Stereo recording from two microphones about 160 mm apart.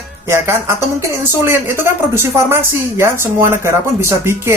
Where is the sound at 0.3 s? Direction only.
15° right (ahead or behind).